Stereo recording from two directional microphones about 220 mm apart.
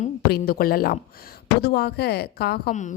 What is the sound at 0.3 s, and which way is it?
Speech, 45° left (ahead or behind).